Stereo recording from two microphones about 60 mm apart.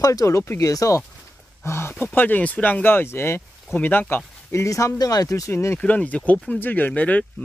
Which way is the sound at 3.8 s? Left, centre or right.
Left.